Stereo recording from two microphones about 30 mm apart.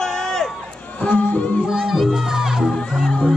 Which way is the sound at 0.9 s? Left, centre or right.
Left.